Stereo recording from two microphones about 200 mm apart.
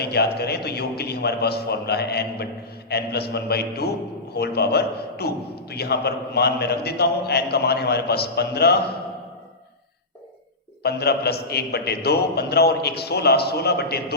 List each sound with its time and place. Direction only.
0.0 s a man's voice: 55° left (ahead or behind)
10.8 s a man's voice: 55° left (ahead or behind)